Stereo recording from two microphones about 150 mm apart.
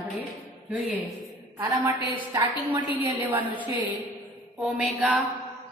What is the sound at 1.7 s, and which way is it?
Speech, 20° right (ahead or behind).